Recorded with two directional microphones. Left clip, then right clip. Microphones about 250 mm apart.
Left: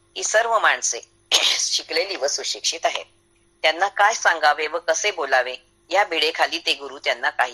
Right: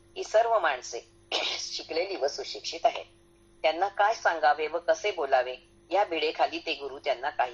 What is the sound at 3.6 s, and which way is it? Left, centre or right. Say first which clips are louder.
Speech: left 7 dB; left.